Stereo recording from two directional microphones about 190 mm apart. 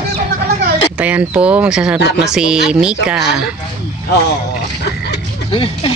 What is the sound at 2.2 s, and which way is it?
Speech, 5° right (ahead or behind).